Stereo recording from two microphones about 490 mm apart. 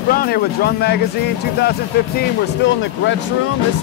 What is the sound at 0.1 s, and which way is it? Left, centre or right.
Speech, centre.